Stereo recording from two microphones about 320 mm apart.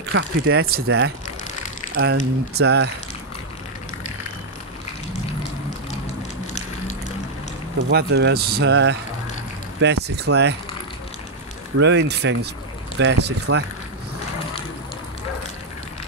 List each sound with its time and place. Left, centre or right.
0.1 s speech: right
7.9 s speech: right
11.8 s speech: right